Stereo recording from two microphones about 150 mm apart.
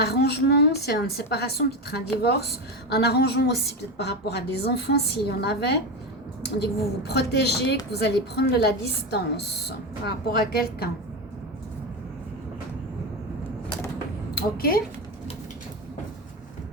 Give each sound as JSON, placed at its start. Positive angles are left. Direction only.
{"t": 0.0, "sound": "a woman's voice", "side_deg": 90}
{"t": 14.3, "sound": "a woman's voice", "side_deg": 90}